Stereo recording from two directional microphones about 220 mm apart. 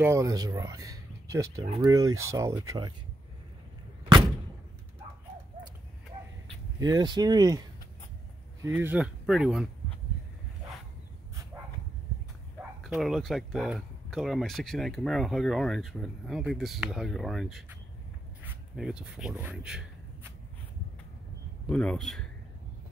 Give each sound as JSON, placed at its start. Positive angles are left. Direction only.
{"t": 0.0, "sound": "speech", "side_deg": -15}
{"t": 6.8, "sound": "speech", "side_deg": -20}
{"t": 8.6, "sound": "speech", "side_deg": -10}
{"t": 12.8, "sound": "speech", "side_deg": 0}
{"t": 18.4, "sound": "a sound", "side_deg": -5}
{"t": 21.6, "sound": "speech", "side_deg": 5}